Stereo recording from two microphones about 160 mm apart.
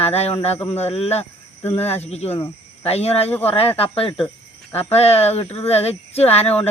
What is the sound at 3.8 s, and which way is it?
Speech, 35° left (ahead or behind).